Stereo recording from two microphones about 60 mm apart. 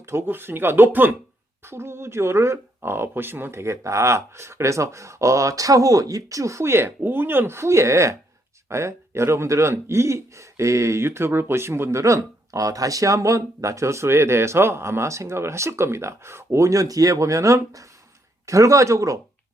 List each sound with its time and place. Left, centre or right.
0.0 s speech: right
3.6 s speech: right